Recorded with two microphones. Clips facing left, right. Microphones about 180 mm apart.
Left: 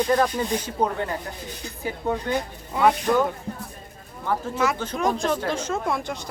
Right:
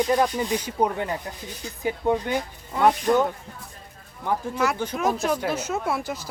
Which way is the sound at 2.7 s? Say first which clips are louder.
Even; centre (ahead or behind).